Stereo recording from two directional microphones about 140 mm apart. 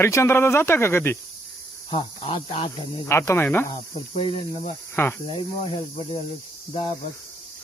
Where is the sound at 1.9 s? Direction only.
40° left (ahead or behind).